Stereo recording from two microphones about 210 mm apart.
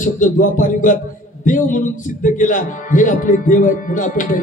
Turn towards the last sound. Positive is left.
turn(degrees=40)  # may be behind; listen again after turning